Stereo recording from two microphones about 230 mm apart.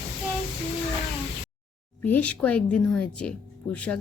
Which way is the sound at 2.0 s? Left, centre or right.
Centre.